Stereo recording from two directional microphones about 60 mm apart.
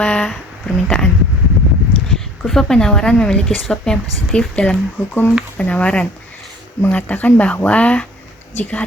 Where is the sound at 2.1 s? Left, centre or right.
Centre.